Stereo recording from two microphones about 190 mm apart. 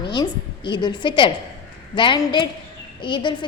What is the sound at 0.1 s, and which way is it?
A woman's voice, 25° left (ahead or behind).